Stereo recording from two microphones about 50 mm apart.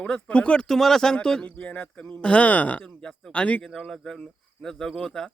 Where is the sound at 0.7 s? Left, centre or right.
Centre.